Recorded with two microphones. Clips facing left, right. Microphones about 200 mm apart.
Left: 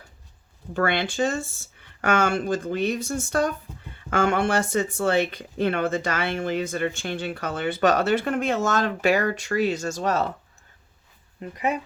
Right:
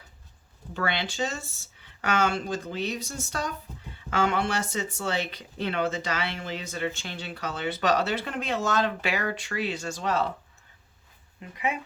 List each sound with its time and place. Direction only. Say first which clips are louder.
0.7 s speech: left 6 dB; 50° left (ahead or behind)
11.3 s speech: left 5 dB; 40° left (ahead or behind)